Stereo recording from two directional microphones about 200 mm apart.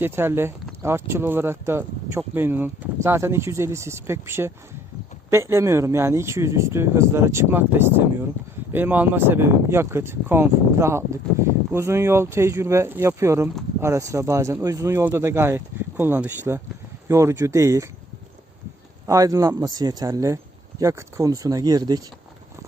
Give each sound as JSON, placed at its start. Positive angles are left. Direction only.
{"t": 0.0, "sound": "speech", "side_deg": -10}
{"t": 19.0, "sound": "speech", "side_deg": -15}